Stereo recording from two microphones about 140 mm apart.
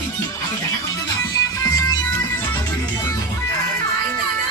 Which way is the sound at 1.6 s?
25° left (ahead or behind).